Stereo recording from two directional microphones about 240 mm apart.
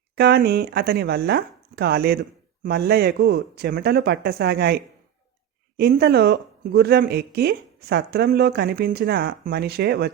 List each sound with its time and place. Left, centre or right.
0.2 s speech: right